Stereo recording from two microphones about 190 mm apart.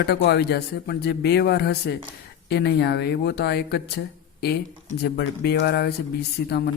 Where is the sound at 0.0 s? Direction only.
60° left (ahead or behind).